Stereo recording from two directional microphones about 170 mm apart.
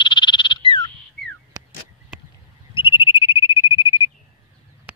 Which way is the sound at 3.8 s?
30° left (ahead or behind).